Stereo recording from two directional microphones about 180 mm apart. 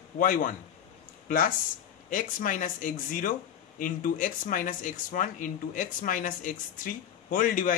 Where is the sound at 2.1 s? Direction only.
50° left (ahead or behind).